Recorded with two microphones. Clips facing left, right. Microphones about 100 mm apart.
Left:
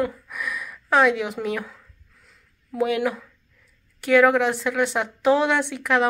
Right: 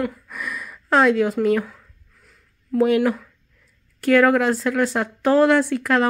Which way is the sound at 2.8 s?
Centre (ahead or behind).